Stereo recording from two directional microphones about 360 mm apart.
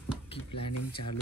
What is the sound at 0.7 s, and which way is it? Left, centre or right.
Speech, left.